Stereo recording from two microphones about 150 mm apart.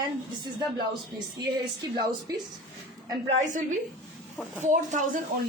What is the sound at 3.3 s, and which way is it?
A woman's voice, 55° right (ahead or behind).